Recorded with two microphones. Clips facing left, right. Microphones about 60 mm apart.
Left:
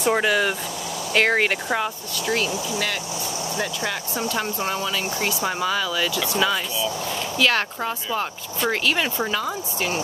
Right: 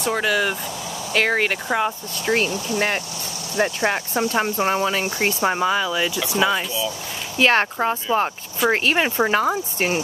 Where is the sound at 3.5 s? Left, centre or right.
Right.